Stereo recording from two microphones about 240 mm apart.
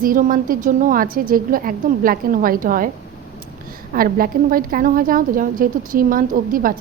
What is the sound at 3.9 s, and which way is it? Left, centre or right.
A woman's voice, right.